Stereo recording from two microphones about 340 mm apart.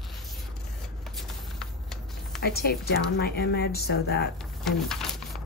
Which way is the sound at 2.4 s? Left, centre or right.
Left.